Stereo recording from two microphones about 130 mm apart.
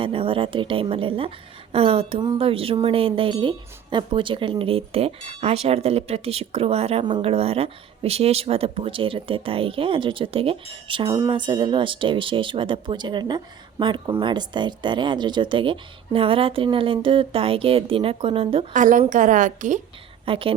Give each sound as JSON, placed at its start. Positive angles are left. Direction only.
{"t": 0.0, "sound": "speech", "side_deg": -45}
{"t": 18.7, "sound": "a woman's voice", "side_deg": -80}
{"t": 20.2, "sound": "a woman's voice", "side_deg": -45}